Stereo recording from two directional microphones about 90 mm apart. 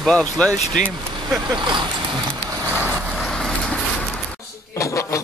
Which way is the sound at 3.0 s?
5° right (ahead or behind).